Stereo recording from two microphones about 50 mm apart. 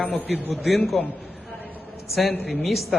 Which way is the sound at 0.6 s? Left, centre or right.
Centre.